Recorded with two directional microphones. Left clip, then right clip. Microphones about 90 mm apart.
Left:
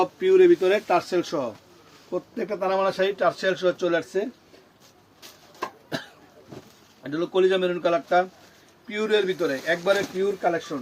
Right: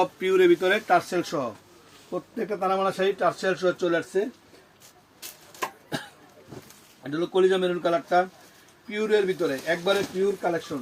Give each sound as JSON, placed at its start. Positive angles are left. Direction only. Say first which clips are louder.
{"t": 0.0, "sound": "speech", "louder": "left 3 dB", "side_deg": -20}
{"t": 2.0, "sound": "speech", "louder": "left 2 dB", "side_deg": 5}
{"t": 2.6, "sound": "speech", "louder": "left 2 dB", "side_deg": 20}
{"t": 7.0, "sound": "a man's voice", "louder": "left 1 dB", "side_deg": 30}
{"t": 8.9, "sound": "speech", "louder": "even", "side_deg": 30}
{"t": 10.0, "sound": "speech", "louder": "left 1 dB", "side_deg": 0}